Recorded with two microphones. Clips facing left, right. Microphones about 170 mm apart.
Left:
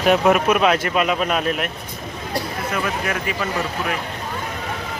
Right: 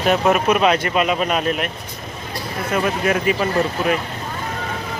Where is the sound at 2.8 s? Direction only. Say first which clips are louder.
Right 5 dB; 25° right (ahead or behind).